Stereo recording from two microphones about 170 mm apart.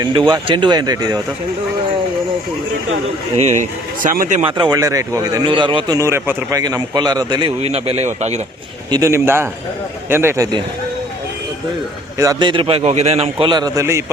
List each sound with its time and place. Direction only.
0.0 s a man's voice: 25° right (ahead or behind)
3.3 s a man's voice: 40° right (ahead or behind)
4.5 s a man's voice: 25° right (ahead or behind); by 8.4 s 40° right (ahead or behind)
8.9 s a man's voice: 20° right (ahead or behind)
12.1 s a man's voice: 20° right (ahead or behind); by 13.5 s 40° right (ahead or behind)
13.5 s a man's voice: 25° right (ahead or behind)